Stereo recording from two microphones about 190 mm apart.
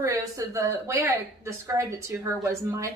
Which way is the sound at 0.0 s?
15° right (ahead or behind).